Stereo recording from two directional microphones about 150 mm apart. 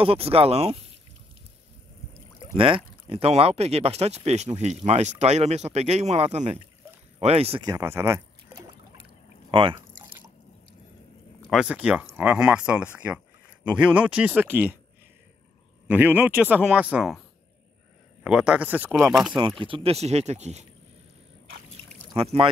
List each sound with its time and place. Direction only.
0.0 s speech: 40° right (ahead or behind)
2.5 s speech: 35° right (ahead or behind)
7.6 s speech: 20° right (ahead or behind)
9.5 s speech: 35° right (ahead or behind)
11.5 s speech: 5° right (ahead or behind)
15.9 s speech: 10° right (ahead or behind)
18.2 s speech: 5° right (ahead or behind)
19.6 s speech: 40° right (ahead or behind)
22.1 s speech: 40° right (ahead or behind)